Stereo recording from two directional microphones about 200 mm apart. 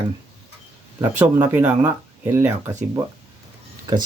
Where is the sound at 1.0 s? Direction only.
10° right (ahead or behind).